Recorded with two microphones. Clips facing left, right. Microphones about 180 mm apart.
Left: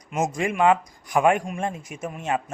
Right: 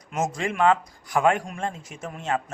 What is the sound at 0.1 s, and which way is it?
Speech, 15° left (ahead or behind).